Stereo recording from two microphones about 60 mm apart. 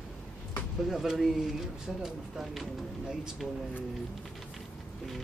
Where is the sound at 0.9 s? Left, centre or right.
Centre.